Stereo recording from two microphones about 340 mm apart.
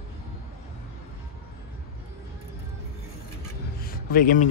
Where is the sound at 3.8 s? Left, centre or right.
Left.